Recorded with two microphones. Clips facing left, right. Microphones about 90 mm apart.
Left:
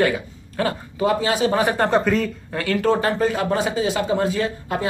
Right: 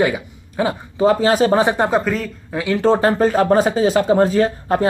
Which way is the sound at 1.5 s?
20° right (ahead or behind).